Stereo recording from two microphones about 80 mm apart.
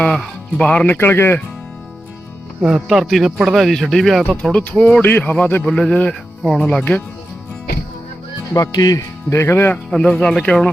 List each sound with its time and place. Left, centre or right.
0.0 s speech: centre
0.9 s a man's voice: left
2.6 s speech: centre
2.8 s a man's voice: centre
8.7 s speech: left
9.9 s speech: centre